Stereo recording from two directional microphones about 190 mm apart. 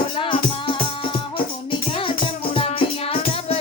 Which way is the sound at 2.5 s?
30° left (ahead or behind).